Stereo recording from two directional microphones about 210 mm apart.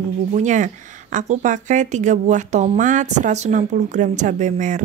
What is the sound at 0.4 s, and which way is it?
Speech, 35° right (ahead or behind).